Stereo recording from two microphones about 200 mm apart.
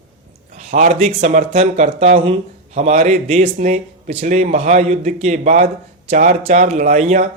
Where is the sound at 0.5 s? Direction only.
35° right (ahead or behind).